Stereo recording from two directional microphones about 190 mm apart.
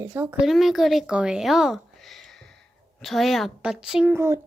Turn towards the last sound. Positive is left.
turn(degrees=-15)  # may be behind; listen again after turning